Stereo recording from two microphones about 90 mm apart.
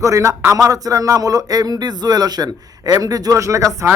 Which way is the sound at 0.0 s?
35° right (ahead or behind).